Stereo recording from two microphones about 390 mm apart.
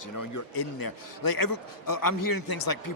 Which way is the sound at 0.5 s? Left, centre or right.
Left.